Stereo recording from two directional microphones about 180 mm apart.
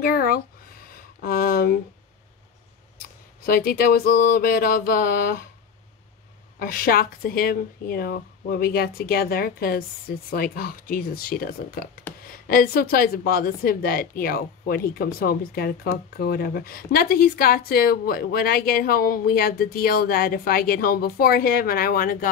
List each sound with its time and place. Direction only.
0.0 s a sound: 55° left (ahead or behind)
3.4 s a woman's voice: 55° left (ahead or behind)
6.6 s a woman's voice: 55° left (ahead or behind)